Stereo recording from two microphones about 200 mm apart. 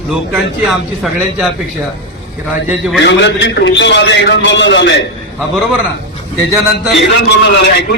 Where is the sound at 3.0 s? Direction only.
60° left (ahead or behind).